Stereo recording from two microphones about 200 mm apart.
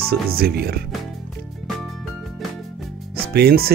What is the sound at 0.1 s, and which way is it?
Speech, 50° right (ahead or behind).